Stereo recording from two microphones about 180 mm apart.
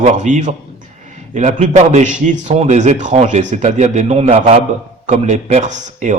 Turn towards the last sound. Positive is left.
turn(degrees=-45)  # may be behind; listen again after turning